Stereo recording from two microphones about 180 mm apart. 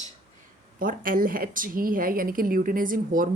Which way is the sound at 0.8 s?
50° right (ahead or behind).